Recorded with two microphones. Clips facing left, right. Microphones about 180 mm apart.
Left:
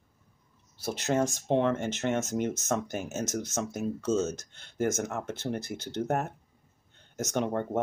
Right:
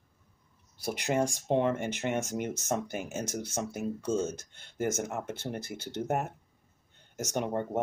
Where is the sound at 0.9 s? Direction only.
15° right (ahead or behind).